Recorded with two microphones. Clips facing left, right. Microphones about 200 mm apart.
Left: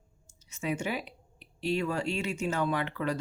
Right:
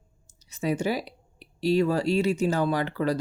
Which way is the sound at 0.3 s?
35° right (ahead or behind).